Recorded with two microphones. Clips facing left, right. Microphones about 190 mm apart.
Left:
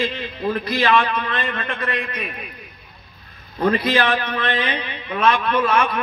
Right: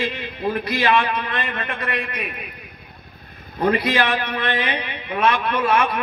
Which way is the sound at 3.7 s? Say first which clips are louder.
Left 2 dB; 20° right (ahead or behind).